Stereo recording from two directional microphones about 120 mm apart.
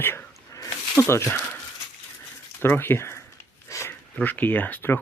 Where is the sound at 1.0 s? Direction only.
20° left (ahead or behind).